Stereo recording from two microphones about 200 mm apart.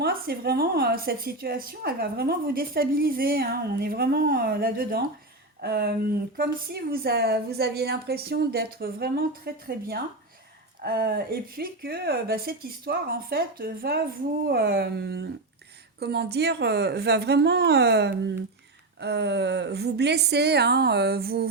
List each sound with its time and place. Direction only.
0.0 s a woman's voice: 50° right (ahead or behind)